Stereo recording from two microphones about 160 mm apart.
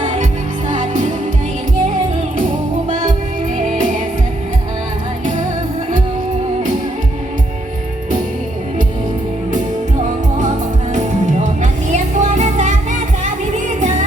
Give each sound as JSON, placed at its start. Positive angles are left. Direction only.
{"t": 0.7, "sound": "music", "side_deg": -55}
{"t": 3.6, "sound": "music", "side_deg": -55}
{"t": 10.9, "sound": "music", "side_deg": -50}